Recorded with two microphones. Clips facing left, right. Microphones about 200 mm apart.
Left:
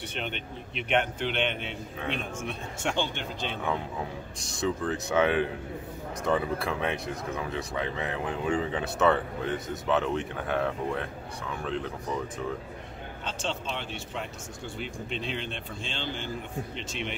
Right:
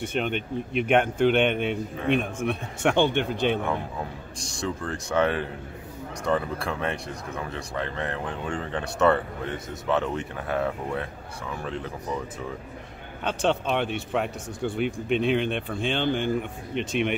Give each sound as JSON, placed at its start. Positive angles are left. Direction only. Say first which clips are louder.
{"t": 0.0, "sound": "speech", "louder": "right 8 dB", "side_deg": -50}
{"t": 4.4, "sound": "speech", "louder": "left 1 dB", "side_deg": 0}
{"t": 13.2, "sound": "speech", "louder": "right 10 dB", "side_deg": -60}